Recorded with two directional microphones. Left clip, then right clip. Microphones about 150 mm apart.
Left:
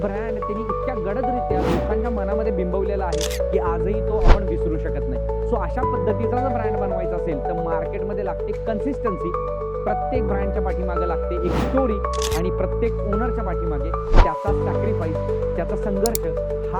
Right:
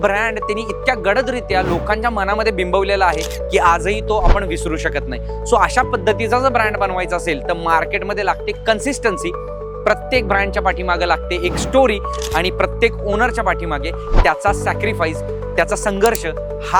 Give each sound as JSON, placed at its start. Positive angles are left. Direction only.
{"t": 0.0, "sound": "speech", "side_deg": -15}
{"t": 5.5, "sound": "speech", "side_deg": -10}
{"t": 12.5, "sound": "speech", "side_deg": -15}